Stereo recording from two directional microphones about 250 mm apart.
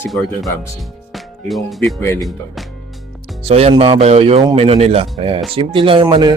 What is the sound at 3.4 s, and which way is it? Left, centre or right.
Speech, right.